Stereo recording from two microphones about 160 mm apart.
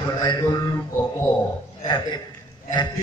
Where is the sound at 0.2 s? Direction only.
25° left (ahead or behind).